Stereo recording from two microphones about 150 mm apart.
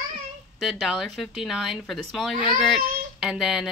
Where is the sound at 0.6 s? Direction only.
Centre (ahead or behind).